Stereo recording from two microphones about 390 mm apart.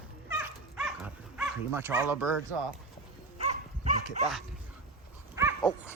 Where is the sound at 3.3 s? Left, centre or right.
Centre.